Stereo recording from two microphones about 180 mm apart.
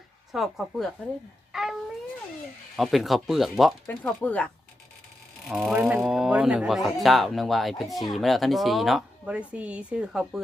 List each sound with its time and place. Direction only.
0.3 s speech: centre (ahead or behind)
1.5 s a sound: 5° right (ahead or behind)
2.7 s speech: centre (ahead or behind)
5.5 s speech: 5° right (ahead or behind)